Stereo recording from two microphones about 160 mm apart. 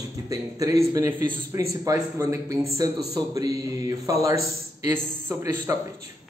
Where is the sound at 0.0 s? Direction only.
20° right (ahead or behind).